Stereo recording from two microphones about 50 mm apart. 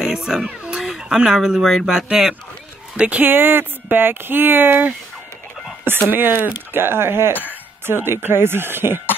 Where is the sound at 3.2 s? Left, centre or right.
Right.